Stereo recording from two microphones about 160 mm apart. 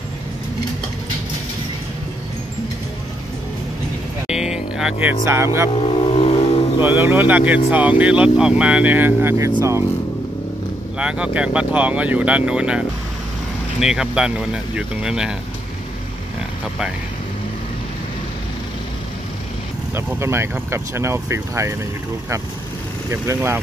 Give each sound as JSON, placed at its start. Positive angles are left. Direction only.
{"t": 4.3, "sound": "speech", "side_deg": -5}
{"t": 5.8, "sound": "speech", "side_deg": 40}
{"t": 6.8, "sound": "speech", "side_deg": -15}
{"t": 11.0, "sound": "speech", "side_deg": -5}
{"t": 19.9, "sound": "speech", "side_deg": -15}
{"t": 23.2, "sound": "speech", "side_deg": -15}